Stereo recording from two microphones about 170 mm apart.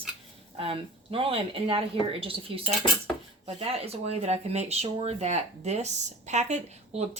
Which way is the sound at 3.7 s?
35° right (ahead or behind).